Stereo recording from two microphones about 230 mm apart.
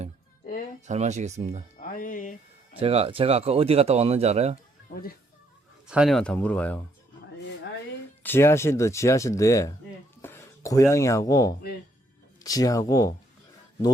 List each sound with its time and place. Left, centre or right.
0.9 s speech: right
1.8 s speech: left
2.7 s speech: right
4.9 s speech: left
5.9 s speech: centre
8.2 s speech: centre